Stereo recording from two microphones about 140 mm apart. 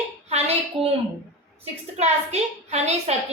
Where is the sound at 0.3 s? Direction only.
50° right (ahead or behind).